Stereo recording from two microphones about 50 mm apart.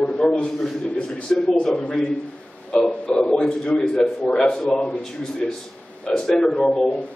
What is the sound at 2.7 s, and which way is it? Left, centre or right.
A man's voice, left.